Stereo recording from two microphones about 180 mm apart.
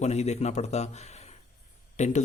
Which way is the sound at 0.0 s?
35° left (ahead or behind).